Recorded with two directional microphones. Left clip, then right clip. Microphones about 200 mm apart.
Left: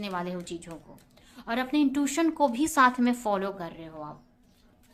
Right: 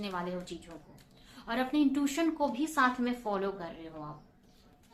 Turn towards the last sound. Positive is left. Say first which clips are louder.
# left 4 dB
turn(degrees=35)  # may be behind; listen again after turning